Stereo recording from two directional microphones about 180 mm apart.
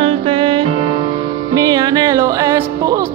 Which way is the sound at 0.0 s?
30° right (ahead or behind).